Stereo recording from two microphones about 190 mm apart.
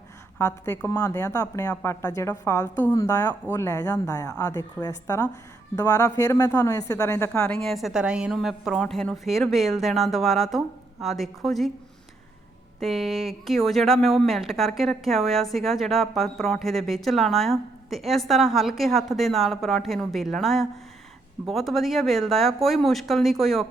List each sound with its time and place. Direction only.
0.3 s a woman's voice: 15° left (ahead or behind)
12.8 s a woman's voice: centre (ahead or behind)